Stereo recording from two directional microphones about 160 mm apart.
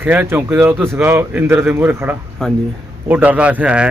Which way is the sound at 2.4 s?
5° left (ahead or behind).